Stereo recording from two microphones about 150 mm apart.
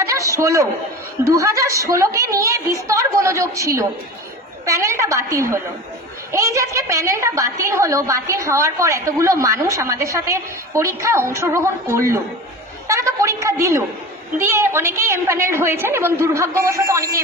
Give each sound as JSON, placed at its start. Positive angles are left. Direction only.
{"t": 0.0, "sound": "a man's voice", "side_deg": -20}